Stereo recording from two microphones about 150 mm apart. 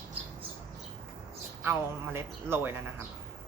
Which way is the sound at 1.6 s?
15° right (ahead or behind).